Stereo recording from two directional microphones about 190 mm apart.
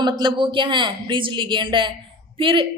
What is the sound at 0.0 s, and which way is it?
A woman's voice, 25° right (ahead or behind).